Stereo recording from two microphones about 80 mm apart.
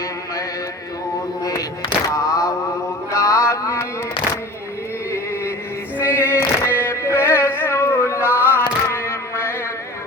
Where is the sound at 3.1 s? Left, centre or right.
Left.